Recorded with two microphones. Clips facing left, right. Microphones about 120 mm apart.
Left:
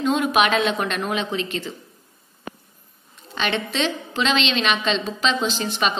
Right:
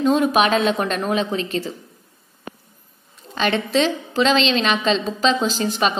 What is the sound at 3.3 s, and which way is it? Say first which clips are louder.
A woman's voice: right 5 dB; 40° right (ahead or behind).